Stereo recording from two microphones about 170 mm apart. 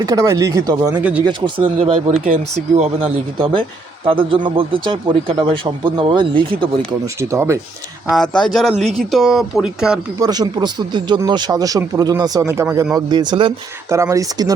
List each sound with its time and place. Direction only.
0.0 s speech: 20° right (ahead or behind)
2.0 s a man's voice: 45° right (ahead or behind); by 7.1 s 30° right (ahead or behind)
7.2 s speech: 15° right (ahead or behind)
8.1 s speech: 5° left (ahead or behind)
10.2 s speech: 25° right (ahead or behind)